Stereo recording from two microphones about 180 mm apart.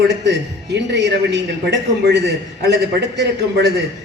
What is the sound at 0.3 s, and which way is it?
A woman's voice, 75° right (ahead or behind).